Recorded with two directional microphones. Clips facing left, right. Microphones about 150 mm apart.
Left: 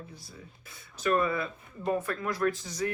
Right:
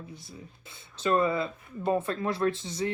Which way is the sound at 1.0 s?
25° right (ahead or behind).